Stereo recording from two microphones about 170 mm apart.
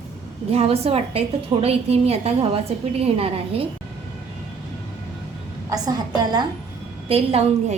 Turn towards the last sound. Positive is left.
turn(degrees=-35)  # may be behind; listen again after turning